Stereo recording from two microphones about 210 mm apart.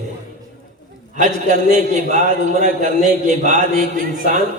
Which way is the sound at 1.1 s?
35° right (ahead or behind).